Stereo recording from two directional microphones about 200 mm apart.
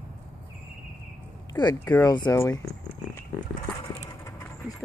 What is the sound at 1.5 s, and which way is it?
Speech, 20° left (ahead or behind).